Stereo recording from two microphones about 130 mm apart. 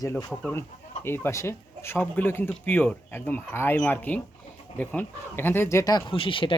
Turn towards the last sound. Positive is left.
turn(degrees=40)  # may be behind; listen again after turning